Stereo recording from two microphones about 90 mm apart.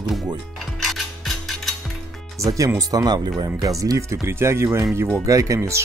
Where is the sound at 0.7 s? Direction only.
Centre (ahead or behind).